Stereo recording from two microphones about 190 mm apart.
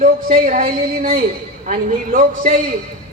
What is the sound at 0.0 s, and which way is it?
A man's voice, 45° right (ahead or behind).